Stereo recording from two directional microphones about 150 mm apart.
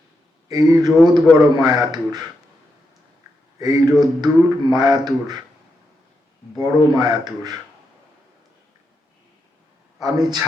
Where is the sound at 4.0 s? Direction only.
5° right (ahead or behind).